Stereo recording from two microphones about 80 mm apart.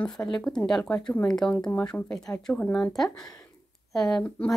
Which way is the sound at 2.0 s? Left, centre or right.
Left.